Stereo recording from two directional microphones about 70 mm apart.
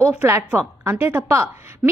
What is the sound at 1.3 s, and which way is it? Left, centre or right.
Speech, right.